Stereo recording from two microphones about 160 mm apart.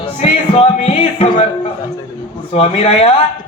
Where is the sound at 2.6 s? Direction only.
40° left (ahead or behind).